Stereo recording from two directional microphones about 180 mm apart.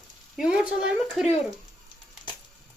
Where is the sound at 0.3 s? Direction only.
5° right (ahead or behind).